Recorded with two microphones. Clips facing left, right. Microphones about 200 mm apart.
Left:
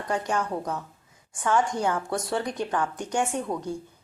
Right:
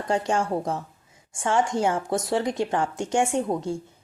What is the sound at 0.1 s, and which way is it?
A woman's voice, 25° right (ahead or behind).